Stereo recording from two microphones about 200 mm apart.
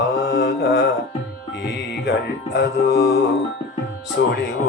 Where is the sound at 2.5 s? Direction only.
55° left (ahead or behind).